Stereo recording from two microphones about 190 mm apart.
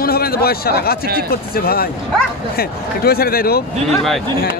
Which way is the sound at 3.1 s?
55° left (ahead or behind).